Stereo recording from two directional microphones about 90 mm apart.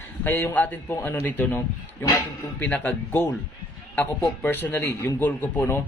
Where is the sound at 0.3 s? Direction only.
20° left (ahead or behind).